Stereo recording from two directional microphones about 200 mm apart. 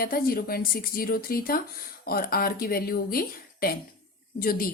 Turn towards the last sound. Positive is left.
turn(degrees=45)  # may be behind; listen again after turning